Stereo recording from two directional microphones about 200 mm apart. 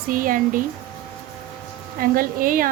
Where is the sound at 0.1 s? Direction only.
45° right (ahead or behind).